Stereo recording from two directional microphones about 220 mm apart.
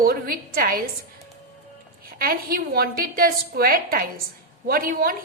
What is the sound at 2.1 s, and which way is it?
A woman's voice, 45° right (ahead or behind).